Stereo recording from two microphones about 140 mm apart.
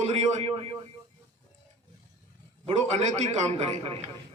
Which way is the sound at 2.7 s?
55° right (ahead or behind).